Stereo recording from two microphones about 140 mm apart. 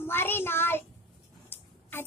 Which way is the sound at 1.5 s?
15° left (ahead or behind).